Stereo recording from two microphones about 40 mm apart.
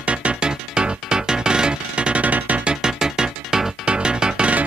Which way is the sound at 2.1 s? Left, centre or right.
Right.